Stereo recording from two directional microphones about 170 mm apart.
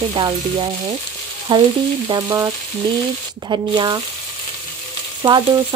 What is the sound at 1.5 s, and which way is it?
Stir, 25° right (ahead or behind).